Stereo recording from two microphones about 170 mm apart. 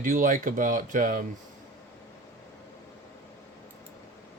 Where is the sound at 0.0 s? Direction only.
50° right (ahead or behind).